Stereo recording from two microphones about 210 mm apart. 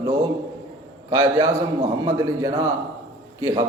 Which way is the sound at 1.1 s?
20° right (ahead or behind).